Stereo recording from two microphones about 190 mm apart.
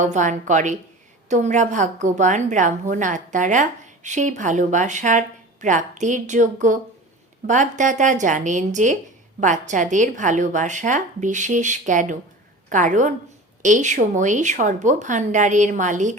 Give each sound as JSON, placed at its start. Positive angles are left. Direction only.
{"t": 0.0, "sound": "a woman's voice", "side_deg": -40}